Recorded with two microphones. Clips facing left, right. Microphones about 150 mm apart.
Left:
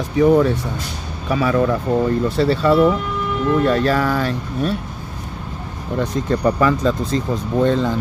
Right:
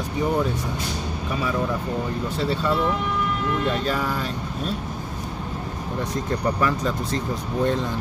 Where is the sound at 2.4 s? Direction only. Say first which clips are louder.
Left 9 dB; 75° left (ahead or behind).